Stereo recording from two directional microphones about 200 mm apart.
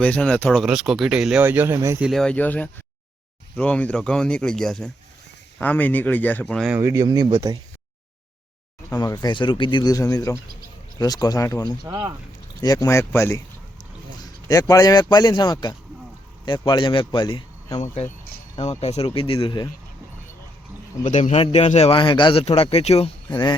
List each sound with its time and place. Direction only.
0.0 s speech: 5° left (ahead or behind); by 2.0 s 15° right (ahead or behind)
2.0 s speech: 5° left (ahead or behind)
6.7 s speech: 15° right (ahead or behind)
9.0 s a man's voice: 20° left (ahead or behind)
11.9 s speech: 20° right (ahead or behind)
12.6 s a man's voice: 15° left (ahead or behind)
21.0 s a man's voice: 35° left (ahead or behind)